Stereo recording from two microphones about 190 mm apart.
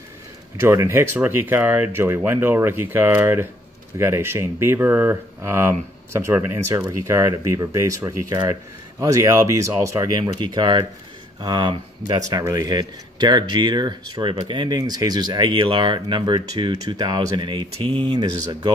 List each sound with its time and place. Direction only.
0.6 s speech: 15° right (ahead or behind)